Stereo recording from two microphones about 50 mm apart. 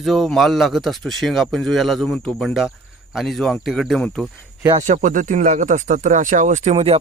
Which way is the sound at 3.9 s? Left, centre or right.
Centre.